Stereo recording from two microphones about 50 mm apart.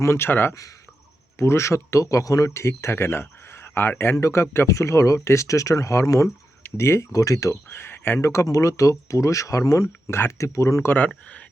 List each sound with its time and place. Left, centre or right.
0.0 s speech: left
0.3 s speech: left
1.4 s speech: left
4.2 s speech: left
6.7 s speech: left
7.8 s a sound: left
8.2 s speech: left
10.1 s speech: left